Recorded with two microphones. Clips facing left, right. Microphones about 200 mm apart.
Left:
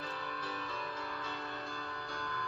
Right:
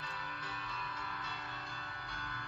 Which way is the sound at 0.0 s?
35° left (ahead or behind).